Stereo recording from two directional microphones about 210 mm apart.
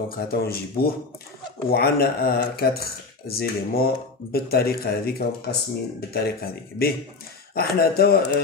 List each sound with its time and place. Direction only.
0.3 s speech: 45° left (ahead or behind)